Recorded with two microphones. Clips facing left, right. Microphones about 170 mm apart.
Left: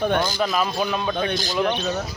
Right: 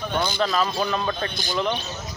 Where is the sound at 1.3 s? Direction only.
90° left.